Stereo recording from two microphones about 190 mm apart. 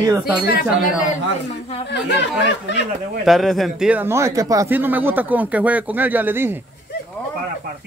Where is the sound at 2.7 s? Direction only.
65° left (ahead or behind).